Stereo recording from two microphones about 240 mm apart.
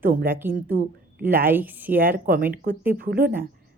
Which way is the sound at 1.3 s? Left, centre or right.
Centre.